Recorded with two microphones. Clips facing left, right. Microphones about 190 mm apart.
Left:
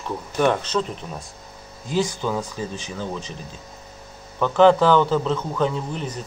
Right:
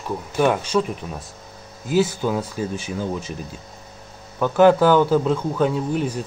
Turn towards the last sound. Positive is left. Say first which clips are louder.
# right 6 dB
turn(degrees=-10)  # may be behind; listen again after turning